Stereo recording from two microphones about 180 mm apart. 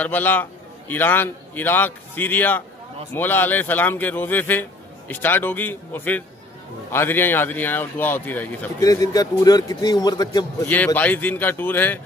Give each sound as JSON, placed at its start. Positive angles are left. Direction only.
{"t": 0.0, "sound": "a man's voice", "side_deg": 10}
{"t": 11.0, "sound": "a man's voice", "side_deg": 10}